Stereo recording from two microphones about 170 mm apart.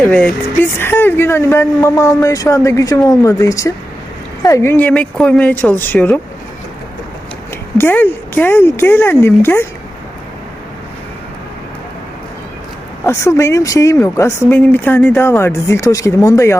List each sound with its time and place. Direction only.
0.0 s speech: 10° left (ahead or behind)
7.8 s speech: 10° left (ahead or behind)
13.1 s speech: 15° left (ahead or behind)